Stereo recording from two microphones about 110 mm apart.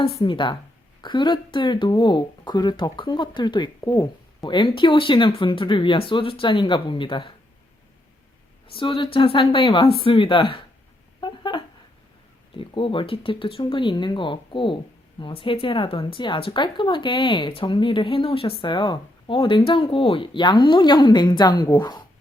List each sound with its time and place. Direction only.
0.0 s speech: 60° left (ahead or behind)
3.8 s speech: 35° left (ahead or behind); by 7.3 s 50° left (ahead or behind)
8.6 s speech: 55° left (ahead or behind)
11.2 s a sound: 45° left (ahead or behind)
12.5 s speech: 50° left (ahead or behind)